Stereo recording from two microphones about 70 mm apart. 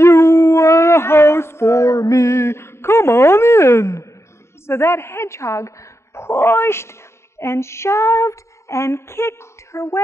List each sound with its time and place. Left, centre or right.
0.0 s music: left
4.6 s a woman's voice: left